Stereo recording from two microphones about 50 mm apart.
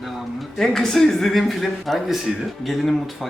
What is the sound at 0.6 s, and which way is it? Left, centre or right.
A woman's voice, centre.